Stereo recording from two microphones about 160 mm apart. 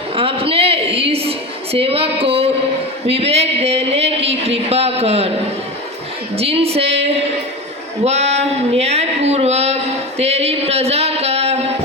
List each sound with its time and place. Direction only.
0.2 s a sound: 35° right (ahead or behind)
3.1 s speech: 40° right (ahead or behind)
6.3 s speech: 40° right (ahead or behind)